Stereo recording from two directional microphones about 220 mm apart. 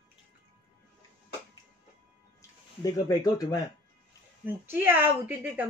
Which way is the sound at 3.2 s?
20° left (ahead or behind).